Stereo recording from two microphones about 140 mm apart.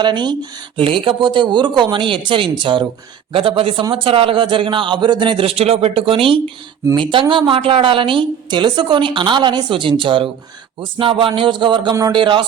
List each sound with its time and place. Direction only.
0.0 s a woman's voice: 30° right (ahead or behind)